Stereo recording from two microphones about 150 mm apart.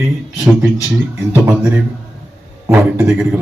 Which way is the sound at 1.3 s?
10° right (ahead or behind).